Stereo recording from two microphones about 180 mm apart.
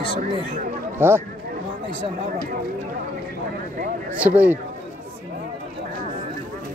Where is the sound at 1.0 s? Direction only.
15° right (ahead or behind).